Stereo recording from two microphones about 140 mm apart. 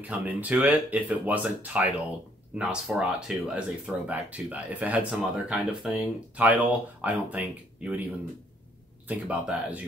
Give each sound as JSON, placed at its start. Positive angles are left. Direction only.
{"t": 0.0, "sound": "speech", "side_deg": -10}
{"t": 9.0, "sound": "speech", "side_deg": -10}